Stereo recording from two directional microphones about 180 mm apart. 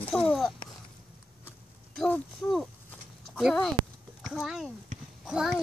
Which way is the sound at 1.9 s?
5° left (ahead or behind).